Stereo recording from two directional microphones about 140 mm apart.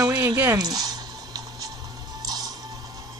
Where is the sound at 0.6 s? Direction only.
30° right (ahead or behind).